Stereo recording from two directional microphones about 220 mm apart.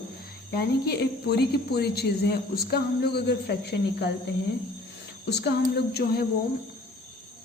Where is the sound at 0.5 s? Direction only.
45° left (ahead or behind).